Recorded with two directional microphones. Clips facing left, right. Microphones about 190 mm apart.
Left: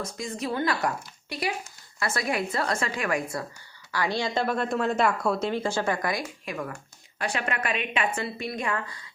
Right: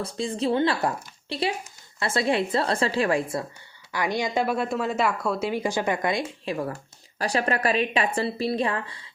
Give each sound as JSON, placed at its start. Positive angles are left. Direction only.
{"t": 0.0, "sound": "speech", "side_deg": -30}
{"t": 3.9, "sound": "a woman's voice", "side_deg": -15}